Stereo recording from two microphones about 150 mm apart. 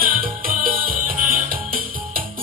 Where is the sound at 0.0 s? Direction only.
70° right (ahead or behind).